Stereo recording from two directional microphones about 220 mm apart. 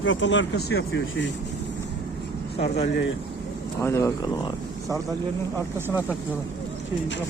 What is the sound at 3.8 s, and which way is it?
Speech, 15° left (ahead or behind).